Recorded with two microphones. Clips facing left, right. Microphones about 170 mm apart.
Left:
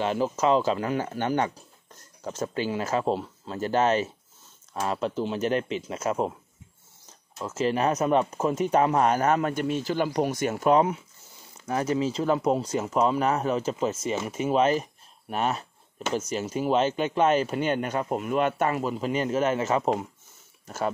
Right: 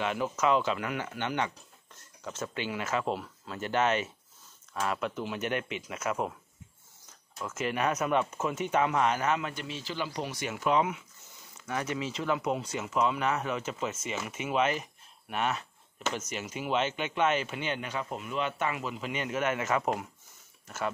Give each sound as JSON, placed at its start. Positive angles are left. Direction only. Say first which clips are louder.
{"t": 0.0, "sound": "speech", "louder": "left 5 dB", "side_deg": 30}
{"t": 7.3, "sound": "speech", "louder": "left 6 dB", "side_deg": 25}